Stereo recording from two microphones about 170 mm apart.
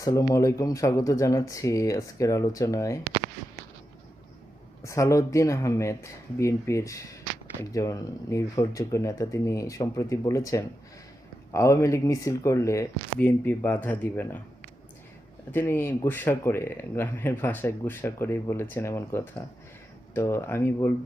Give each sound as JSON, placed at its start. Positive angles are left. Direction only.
{"t": 0.0, "sound": "speech", "side_deg": 20}
{"t": 4.8, "sound": "speech", "side_deg": 20}
{"t": 15.5, "sound": "speech", "side_deg": 15}